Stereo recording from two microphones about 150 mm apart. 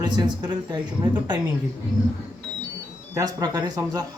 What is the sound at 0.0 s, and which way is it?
Speech, 30° right (ahead or behind).